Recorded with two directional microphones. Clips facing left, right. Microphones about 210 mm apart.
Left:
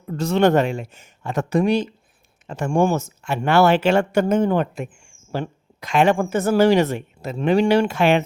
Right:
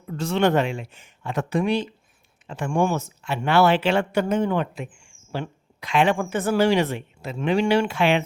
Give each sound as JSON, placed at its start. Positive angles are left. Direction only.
{"t": 0.1, "sound": "speech", "side_deg": 40}